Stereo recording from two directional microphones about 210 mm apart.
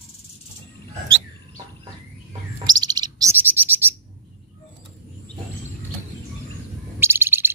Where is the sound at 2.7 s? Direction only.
20° right (ahead or behind).